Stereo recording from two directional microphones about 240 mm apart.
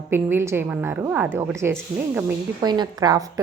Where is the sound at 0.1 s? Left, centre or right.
Centre.